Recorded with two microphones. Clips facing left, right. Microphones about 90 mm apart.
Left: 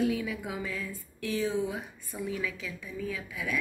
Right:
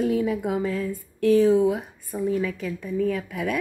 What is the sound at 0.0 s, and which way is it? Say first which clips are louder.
Speech: right 7 dB; 45° right (ahead or behind).